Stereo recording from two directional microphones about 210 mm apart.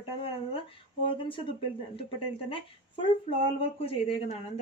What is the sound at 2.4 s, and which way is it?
A woman's voice, 25° left (ahead or behind).